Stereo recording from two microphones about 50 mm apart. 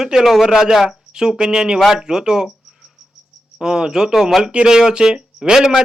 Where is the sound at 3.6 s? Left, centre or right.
Centre.